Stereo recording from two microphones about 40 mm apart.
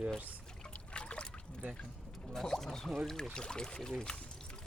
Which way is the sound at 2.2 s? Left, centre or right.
Centre.